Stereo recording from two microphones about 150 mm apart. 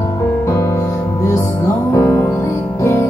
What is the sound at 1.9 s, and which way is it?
Music, 20° left (ahead or behind).